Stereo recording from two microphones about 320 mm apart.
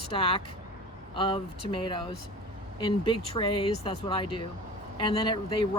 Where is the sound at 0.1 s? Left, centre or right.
Centre.